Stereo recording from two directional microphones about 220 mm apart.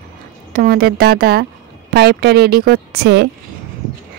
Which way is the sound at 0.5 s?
45° right (ahead or behind).